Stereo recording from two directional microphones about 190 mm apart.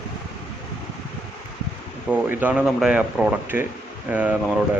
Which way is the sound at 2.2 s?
10° right (ahead or behind).